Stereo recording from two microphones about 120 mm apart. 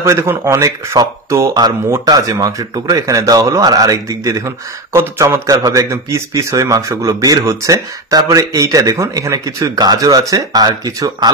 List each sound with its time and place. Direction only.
0.0 s a man's voice: 20° right (ahead or behind)